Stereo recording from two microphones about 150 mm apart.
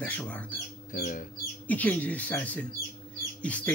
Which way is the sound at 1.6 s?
10° left (ahead or behind).